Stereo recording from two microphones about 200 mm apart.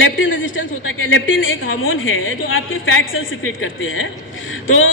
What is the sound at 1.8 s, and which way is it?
A woman's voice, 85° left.